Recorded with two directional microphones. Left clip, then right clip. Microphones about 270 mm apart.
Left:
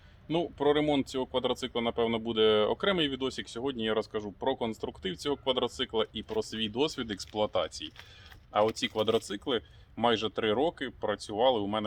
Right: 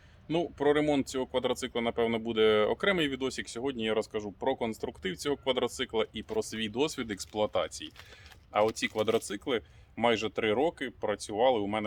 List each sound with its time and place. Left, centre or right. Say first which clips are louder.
0.3 s speech: even; centre